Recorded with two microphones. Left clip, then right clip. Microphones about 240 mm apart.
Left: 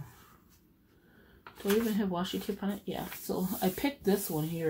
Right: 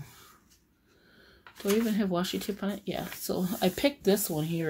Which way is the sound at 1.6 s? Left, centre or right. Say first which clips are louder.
Right 2 dB; right.